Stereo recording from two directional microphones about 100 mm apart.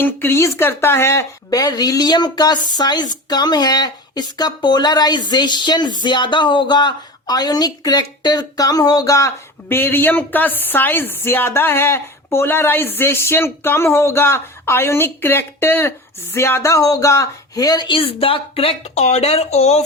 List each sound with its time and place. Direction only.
0.0 s speech: 20° left (ahead or behind)
1.5 s speech: 40° left (ahead or behind)
17.8 s speech: 65° left (ahead or behind); by 19.8 s 90° left